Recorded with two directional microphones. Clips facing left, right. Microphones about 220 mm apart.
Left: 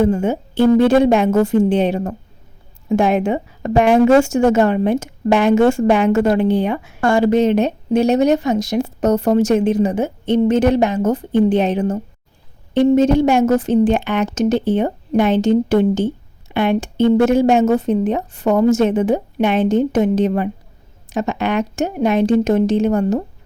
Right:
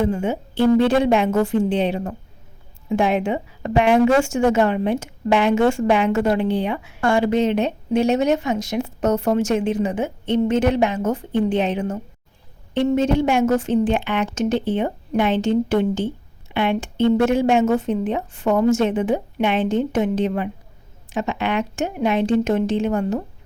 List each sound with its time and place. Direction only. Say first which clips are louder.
0.0 s a woman's voice: left 5 dB; 45° left (ahead or behind)